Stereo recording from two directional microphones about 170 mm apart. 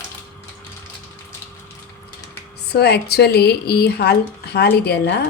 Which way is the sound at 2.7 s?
70° left (ahead or behind).